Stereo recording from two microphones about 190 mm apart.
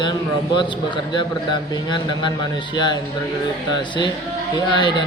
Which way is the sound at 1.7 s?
25° left (ahead or behind).